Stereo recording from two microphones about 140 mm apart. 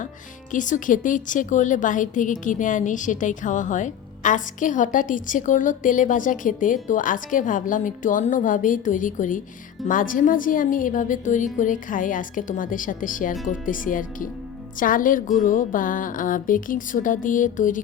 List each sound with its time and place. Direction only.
0.5 s a woman's voice: 65° left (ahead or behind)